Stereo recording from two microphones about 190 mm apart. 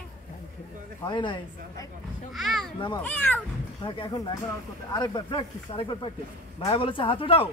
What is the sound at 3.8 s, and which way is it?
A man's voice, 25° left (ahead or behind).